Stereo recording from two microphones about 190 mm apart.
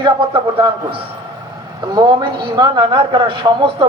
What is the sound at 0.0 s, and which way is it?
Speech, 25° right (ahead or behind).